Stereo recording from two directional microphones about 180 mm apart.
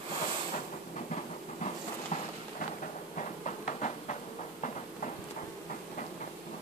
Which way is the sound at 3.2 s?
45° left (ahead or behind).